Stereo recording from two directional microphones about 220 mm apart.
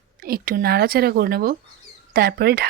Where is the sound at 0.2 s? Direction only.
40° right (ahead or behind).